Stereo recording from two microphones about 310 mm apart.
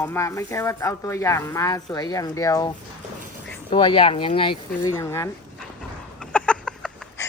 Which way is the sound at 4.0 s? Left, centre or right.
Centre.